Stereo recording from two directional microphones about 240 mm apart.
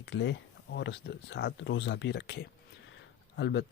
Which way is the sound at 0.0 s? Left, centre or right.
Left.